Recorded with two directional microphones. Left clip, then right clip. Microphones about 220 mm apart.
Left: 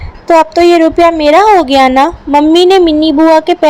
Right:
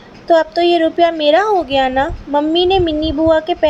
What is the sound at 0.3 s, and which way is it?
A woman's voice, 30° left (ahead or behind).